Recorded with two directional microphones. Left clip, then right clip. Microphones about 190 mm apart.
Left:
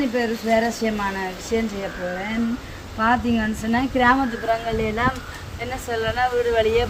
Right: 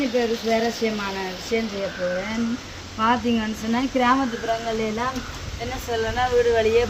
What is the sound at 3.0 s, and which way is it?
Speech, centre (ahead or behind).